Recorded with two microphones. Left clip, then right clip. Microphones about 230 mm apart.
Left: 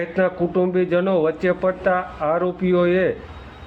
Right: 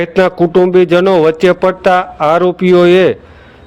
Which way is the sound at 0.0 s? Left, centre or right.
Right.